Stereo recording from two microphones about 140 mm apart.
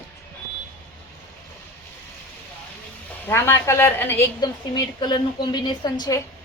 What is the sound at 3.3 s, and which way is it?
A woman's voice, 15° left (ahead or behind).